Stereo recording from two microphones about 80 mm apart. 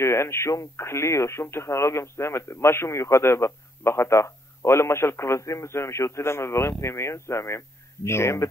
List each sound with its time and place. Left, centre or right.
0.0 s speech: left